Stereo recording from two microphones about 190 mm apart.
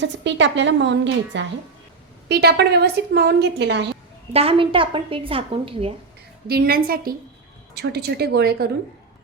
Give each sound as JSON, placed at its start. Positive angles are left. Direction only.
{"t": 0.0, "sound": "a woman's voice", "side_deg": -70}
{"t": 4.3, "sound": "a woman's voice", "side_deg": -30}
{"t": 6.5, "sound": "a woman's voice", "side_deg": -50}